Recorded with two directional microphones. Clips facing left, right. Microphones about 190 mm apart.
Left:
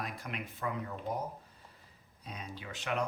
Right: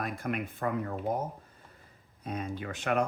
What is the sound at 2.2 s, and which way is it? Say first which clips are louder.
Speech: right 9 dB; 50° right (ahead or behind).